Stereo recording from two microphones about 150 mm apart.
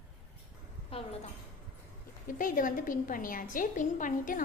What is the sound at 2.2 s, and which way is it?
A woman's voice, 60° left (ahead or behind).